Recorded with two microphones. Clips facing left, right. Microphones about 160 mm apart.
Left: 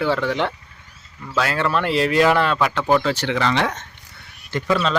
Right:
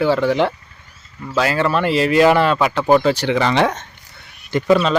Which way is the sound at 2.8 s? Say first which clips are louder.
Right 6 dB; 15° right (ahead or behind).